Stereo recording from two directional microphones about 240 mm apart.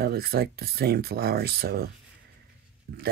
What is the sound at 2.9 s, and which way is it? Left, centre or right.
Speech, right.